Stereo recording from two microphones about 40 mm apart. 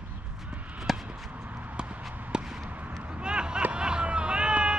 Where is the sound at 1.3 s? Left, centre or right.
Right.